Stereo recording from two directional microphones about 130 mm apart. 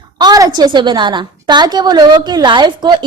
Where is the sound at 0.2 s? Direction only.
30° right (ahead or behind).